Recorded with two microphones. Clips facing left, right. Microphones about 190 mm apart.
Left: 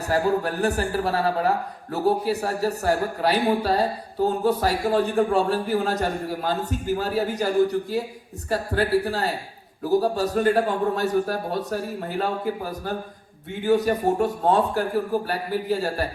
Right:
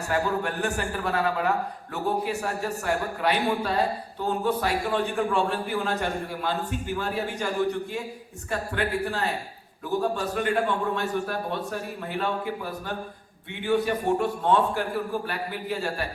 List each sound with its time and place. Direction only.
0.1 s a man's voice: 35° left (ahead or behind)